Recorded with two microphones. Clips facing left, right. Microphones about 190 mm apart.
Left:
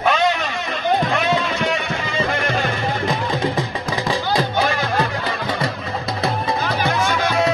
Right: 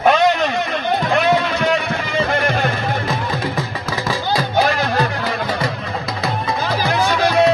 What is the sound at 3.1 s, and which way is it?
Music, 15° left (ahead or behind).